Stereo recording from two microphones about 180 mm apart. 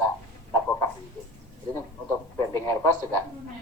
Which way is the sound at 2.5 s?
20° left (ahead or behind).